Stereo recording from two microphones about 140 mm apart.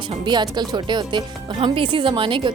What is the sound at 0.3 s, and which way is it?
A woman's voice, 30° right (ahead or behind).